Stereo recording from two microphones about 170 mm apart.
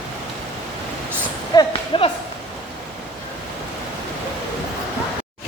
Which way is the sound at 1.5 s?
25° left (ahead or behind).